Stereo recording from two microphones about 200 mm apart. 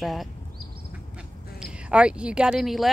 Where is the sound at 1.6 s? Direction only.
5° right (ahead or behind).